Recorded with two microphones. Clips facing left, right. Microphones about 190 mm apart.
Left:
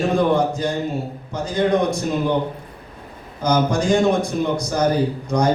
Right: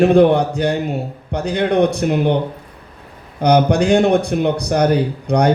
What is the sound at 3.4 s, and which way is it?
A man's voice, 65° right (ahead or behind).